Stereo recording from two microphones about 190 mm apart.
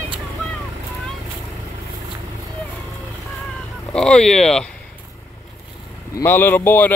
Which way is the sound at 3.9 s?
5° left (ahead or behind).